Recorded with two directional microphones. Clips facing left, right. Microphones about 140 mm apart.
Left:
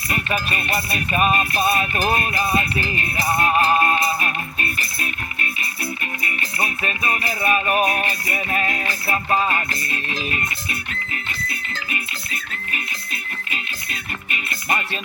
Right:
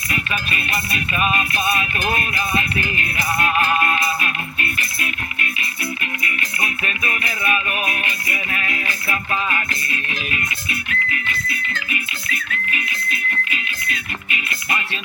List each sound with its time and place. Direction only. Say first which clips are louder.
0.1 s music: left 2 dB; 40° left (ahead or behind)
14.3 s music: left 2 dB; 40° left (ahead or behind)